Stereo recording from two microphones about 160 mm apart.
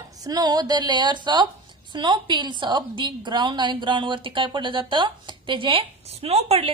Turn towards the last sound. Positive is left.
turn(degrees=-40)  # may be behind; listen again after turning